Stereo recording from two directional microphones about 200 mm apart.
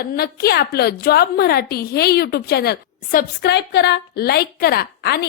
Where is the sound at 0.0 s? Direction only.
50° left (ahead or behind).